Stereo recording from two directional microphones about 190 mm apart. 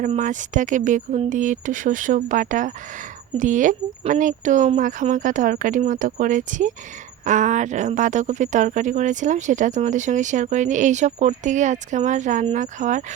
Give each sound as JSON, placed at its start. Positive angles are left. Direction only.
{"t": 0.0, "sound": "speech", "side_deg": -40}